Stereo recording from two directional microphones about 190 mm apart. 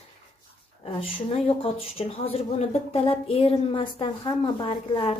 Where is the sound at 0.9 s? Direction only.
30° left (ahead or behind).